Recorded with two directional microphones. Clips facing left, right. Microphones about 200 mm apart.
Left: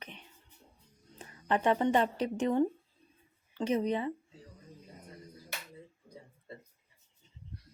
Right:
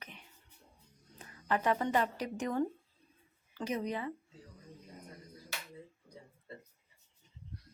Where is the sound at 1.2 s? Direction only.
25° left (ahead or behind).